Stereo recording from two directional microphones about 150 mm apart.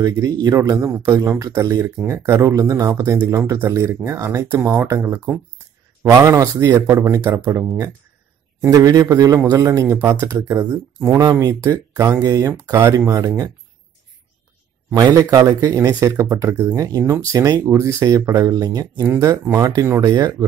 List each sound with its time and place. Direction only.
0.0 s speech: 25° right (ahead or behind)
15.0 s speech: 25° right (ahead or behind)